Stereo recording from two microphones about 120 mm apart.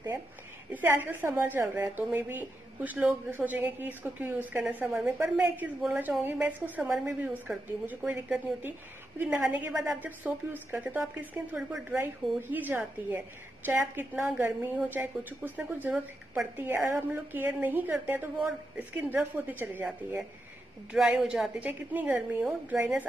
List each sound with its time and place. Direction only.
0.7 s a woman's voice: 15° right (ahead or behind)
20.9 s a woman's voice: 5° right (ahead or behind)